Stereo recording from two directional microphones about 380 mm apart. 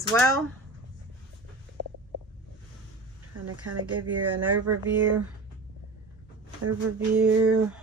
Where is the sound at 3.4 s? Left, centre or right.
Right.